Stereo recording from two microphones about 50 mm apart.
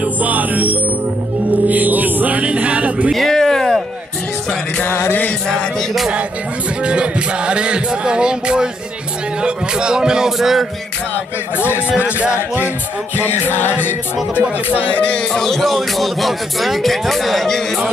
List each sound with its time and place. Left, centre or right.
0.0 s music: right
3.1 s a sound: centre
5.5 s music: centre
6.8 s music: right
9.4 s speech: centre
11.5 s music: left
12.0 s music: right
13.2 s music: left
15.1 s music: centre